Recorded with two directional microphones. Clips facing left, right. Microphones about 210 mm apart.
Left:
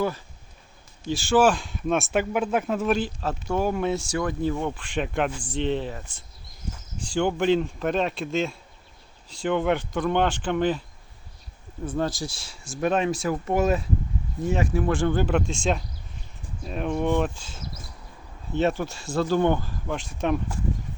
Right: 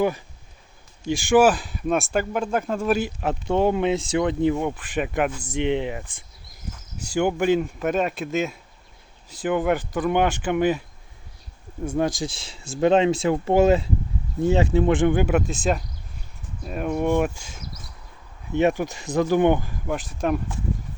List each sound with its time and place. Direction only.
1.1 s speech: 15° right (ahead or behind); by 2.9 s 5° left (ahead or behind)
2.9 s speech: 15° right (ahead or behind)
4.7 s speech: 5° right (ahead or behind)
7.1 s speech: 10° right (ahead or behind)
11.9 s speech: 15° right (ahead or behind)
20.2 s speech: centre (ahead or behind)